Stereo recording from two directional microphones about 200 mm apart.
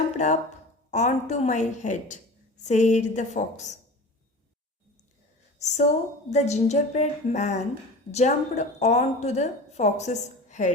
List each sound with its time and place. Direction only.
0.9 s a woman's voice: 35° left (ahead or behind)
5.5 s a woman's voice: 35° left (ahead or behind)